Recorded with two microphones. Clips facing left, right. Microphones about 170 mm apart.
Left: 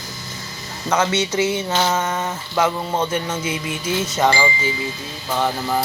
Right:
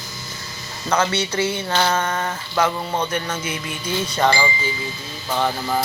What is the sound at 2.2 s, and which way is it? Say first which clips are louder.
Speech: left 1 dB; 10° left (ahead or behind).